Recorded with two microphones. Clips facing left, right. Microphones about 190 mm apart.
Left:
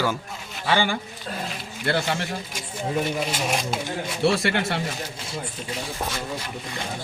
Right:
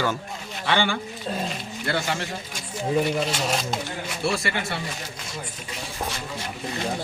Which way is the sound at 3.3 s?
10° left (ahead or behind).